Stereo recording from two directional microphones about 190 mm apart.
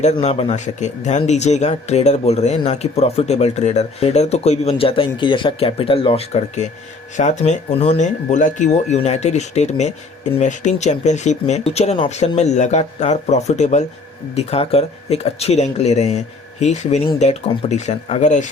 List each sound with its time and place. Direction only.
0.0 s speech: 35° left (ahead or behind)